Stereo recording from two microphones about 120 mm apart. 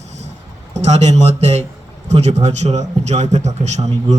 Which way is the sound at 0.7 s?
65° right (ahead or behind).